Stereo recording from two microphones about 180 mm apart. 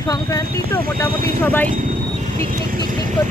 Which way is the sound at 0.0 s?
20° left (ahead or behind).